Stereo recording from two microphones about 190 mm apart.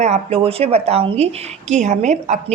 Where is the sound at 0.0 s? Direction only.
35° right (ahead or behind).